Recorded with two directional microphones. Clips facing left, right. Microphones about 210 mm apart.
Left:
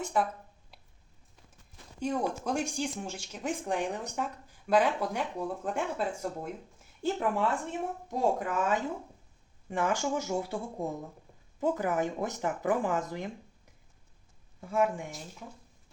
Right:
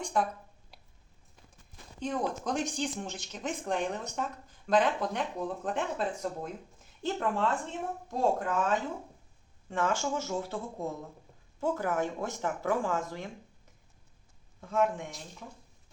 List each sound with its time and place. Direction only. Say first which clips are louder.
0.0 s speech: left 1 dB; 5° left (ahead or behind)
0.7 s a sound: right 1 dB; centre (ahead or behind)
2.0 s speech: left 1 dB; 10° left (ahead or behind)
14.6 s speech: even; 10° left (ahead or behind)